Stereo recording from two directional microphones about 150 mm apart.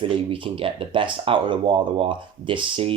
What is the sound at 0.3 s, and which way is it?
Speech, 40° right (ahead or behind).